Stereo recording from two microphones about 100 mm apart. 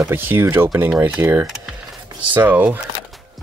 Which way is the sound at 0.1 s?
20° right (ahead or behind).